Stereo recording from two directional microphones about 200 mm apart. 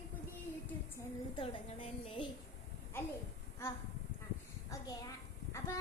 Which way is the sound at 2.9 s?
10° left (ahead or behind).